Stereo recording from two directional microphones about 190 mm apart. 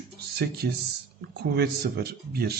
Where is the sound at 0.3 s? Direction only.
55° right (ahead or behind).